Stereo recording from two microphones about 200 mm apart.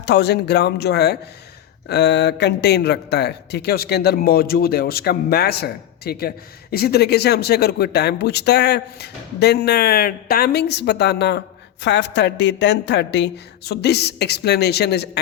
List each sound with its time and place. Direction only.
0.0 s speech: 55° left (ahead or behind)